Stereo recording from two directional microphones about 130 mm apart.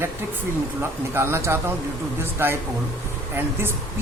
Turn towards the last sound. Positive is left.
turn(degrees=-15)  # may be behind; listen again after turning